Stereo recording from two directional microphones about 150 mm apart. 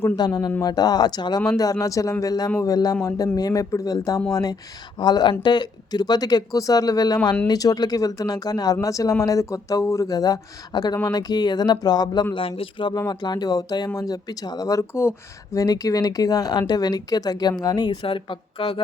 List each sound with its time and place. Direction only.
0.2 s speech: 25° left (ahead or behind)